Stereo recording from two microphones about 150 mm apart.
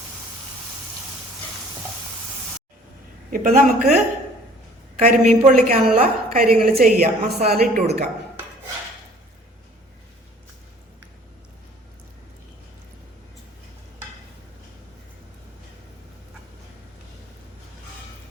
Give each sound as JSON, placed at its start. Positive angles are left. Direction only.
{"t": 3.3, "sound": "a woman's voice", "side_deg": -65}
{"t": 5.0, "sound": "a woman's voice", "side_deg": -55}
{"t": 5.6, "sound": "a woman's voice", "side_deg": -70}